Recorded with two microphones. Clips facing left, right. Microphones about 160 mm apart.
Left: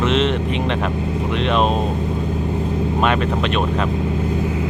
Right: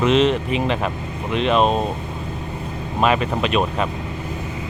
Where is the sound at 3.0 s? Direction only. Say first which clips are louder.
Right 2 dB; 5° right (ahead or behind).